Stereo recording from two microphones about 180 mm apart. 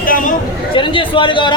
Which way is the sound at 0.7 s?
30° left (ahead or behind).